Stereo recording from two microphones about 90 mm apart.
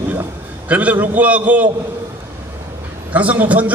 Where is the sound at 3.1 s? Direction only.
15° right (ahead or behind).